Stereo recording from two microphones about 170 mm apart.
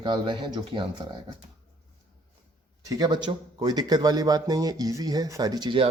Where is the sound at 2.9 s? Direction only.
25° right (ahead or behind).